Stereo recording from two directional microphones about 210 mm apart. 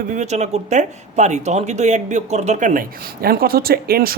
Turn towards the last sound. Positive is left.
turn(degrees=-45)  # may be behind; listen again after turning